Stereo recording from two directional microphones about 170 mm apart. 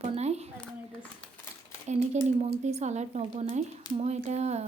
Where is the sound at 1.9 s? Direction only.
40° right (ahead or behind).